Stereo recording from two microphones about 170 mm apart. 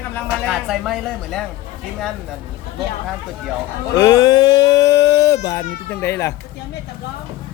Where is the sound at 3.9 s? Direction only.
20° left (ahead or behind).